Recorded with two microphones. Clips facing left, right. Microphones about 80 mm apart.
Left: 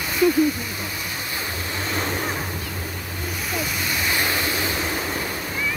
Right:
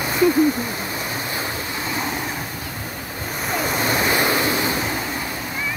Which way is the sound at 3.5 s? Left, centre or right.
Right.